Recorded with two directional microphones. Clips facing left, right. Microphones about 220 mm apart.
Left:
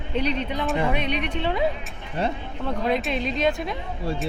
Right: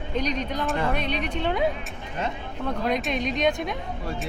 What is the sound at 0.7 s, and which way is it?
Speech, 10° left (ahead or behind).